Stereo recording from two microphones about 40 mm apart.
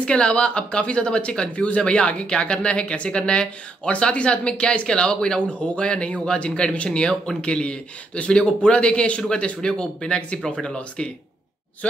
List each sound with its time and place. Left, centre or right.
0.0 s speech: left